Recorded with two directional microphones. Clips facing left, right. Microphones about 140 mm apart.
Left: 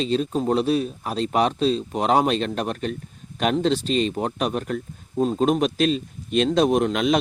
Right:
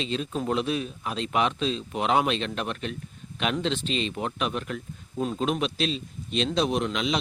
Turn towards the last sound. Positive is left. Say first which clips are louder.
# left 7 dB
turn(degrees=50)  # may be behind; listen again after turning